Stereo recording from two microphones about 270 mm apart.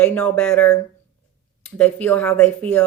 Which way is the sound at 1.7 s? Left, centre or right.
Centre.